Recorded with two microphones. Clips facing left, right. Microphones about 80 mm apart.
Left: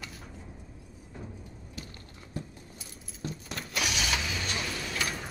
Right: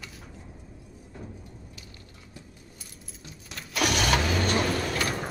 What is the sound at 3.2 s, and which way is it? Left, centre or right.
Keys jangling, centre.